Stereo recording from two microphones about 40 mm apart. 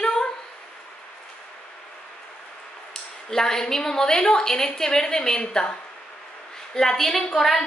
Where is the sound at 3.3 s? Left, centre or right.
Centre.